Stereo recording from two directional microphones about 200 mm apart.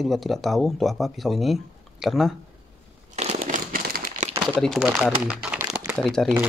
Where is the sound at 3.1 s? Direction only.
35° right (ahead or behind).